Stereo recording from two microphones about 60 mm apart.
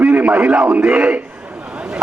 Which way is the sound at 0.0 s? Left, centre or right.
Centre.